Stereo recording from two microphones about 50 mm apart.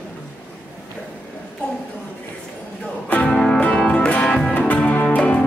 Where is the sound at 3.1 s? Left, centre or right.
Left.